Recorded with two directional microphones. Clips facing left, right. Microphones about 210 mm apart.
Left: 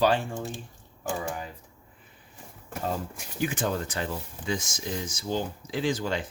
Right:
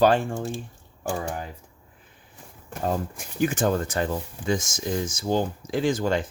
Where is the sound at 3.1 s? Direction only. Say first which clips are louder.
Right 5 dB; 50° right (ahead or behind).